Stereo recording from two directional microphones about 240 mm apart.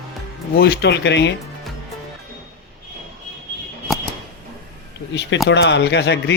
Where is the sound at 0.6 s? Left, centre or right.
Left.